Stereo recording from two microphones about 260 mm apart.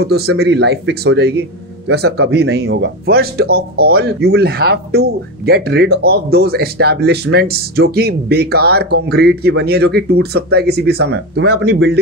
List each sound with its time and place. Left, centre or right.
0.0 s speech: right